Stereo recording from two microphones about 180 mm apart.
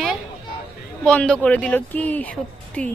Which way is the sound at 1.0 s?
5° left (ahead or behind).